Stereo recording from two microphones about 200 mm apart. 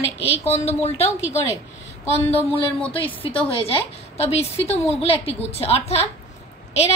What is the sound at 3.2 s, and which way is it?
A woman's voice, 25° left (ahead or behind).